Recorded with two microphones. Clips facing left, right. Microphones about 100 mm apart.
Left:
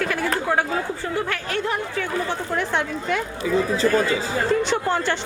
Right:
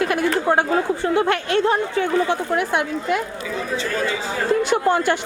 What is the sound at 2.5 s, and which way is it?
Speech, 10° right (ahead or behind).